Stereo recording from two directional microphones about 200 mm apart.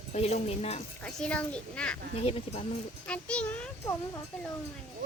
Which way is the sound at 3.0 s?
5° left (ahead or behind).